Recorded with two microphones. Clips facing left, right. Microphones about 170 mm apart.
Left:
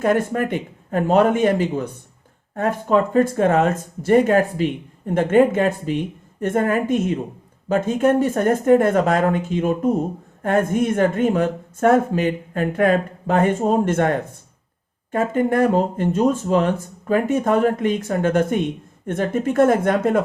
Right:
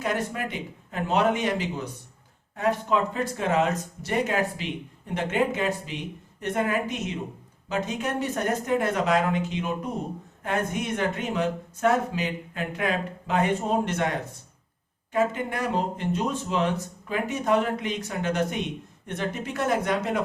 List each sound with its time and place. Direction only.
0.0 s speech: 50° left (ahead or behind)